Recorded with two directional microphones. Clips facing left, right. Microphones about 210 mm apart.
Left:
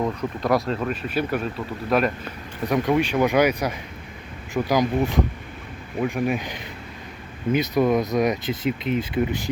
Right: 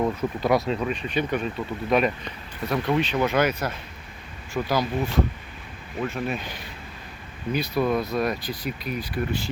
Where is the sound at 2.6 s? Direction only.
15° left (ahead or behind).